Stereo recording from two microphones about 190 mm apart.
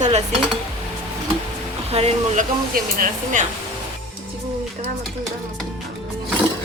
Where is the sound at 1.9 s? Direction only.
35° right (ahead or behind).